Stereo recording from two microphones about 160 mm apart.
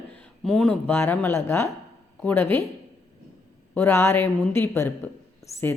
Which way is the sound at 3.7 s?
15° left (ahead or behind).